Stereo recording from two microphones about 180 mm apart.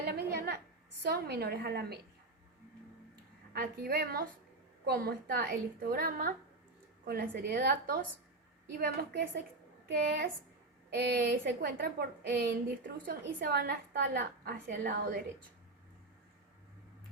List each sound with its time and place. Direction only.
0.0 s a sound: 65° right (ahead or behind)
1.0 s a woman's voice: 60° right (ahead or behind)
3.5 s a woman's voice: 55° right (ahead or behind)